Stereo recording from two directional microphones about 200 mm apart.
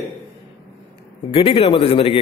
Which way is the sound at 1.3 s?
30° left (ahead or behind).